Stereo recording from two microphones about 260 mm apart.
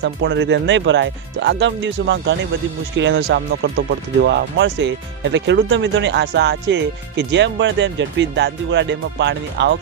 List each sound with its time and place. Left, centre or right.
0.0 s speech: right